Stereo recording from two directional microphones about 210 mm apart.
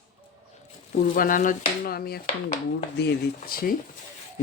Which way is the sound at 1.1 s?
40° left (ahead or behind).